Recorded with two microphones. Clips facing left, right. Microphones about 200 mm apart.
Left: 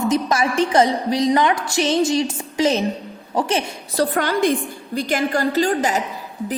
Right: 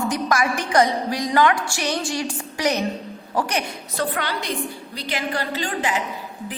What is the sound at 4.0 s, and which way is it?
A woman's voice, 45° left (ahead or behind).